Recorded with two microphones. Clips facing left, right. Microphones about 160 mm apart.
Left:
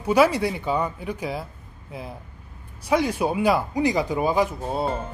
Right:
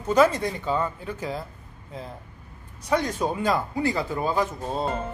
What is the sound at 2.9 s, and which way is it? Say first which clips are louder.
Speech: left 3 dB; 10° left (ahead or behind).